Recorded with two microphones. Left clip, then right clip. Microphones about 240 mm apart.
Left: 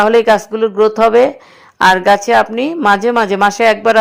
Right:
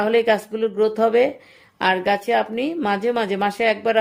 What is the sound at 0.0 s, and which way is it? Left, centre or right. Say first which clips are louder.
A woman's voice: left 8 dB; centre.